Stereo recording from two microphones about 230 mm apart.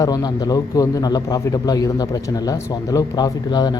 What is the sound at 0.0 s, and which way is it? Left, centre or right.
Speech, centre.